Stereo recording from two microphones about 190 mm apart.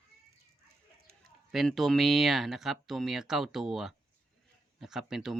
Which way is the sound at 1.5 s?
Centre (ahead or behind).